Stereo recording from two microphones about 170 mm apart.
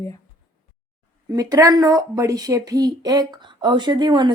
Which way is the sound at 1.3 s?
20° right (ahead or behind).